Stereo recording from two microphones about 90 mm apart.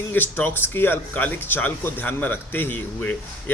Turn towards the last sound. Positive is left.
turn(degrees=20)  # may be behind; listen again after turning